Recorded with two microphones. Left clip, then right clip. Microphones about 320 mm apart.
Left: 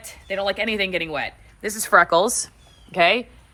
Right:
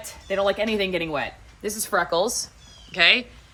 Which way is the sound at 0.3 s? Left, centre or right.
Centre.